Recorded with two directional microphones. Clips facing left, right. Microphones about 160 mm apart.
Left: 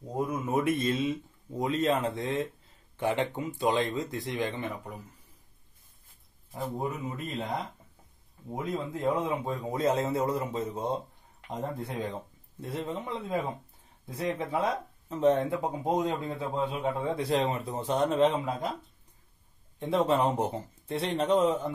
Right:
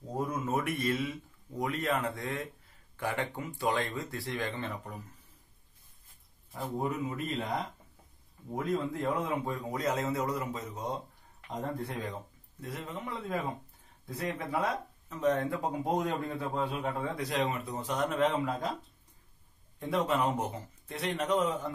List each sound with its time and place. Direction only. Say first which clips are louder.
0.1 s speech: left 3 dB; 15° left (ahead or behind)
6.5 s speech: even; 20° left (ahead or behind)
8.5 s speech: right 1 dB; 25° left (ahead or behind)
19.8 s speech: left 4 dB; 25° left (ahead or behind)